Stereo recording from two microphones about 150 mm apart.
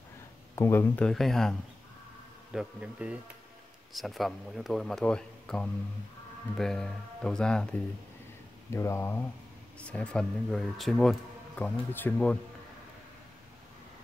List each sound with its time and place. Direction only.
0.6 s speech: 15° left (ahead or behind)
2.5 s speech: 5° right (ahead or behind)
8.6 s speech: 20° left (ahead or behind)